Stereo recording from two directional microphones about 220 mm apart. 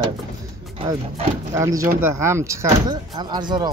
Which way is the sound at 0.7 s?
25° right (ahead or behind).